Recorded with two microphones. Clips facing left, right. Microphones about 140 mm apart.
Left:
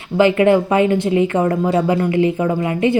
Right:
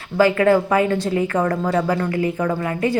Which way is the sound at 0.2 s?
20° left (ahead or behind).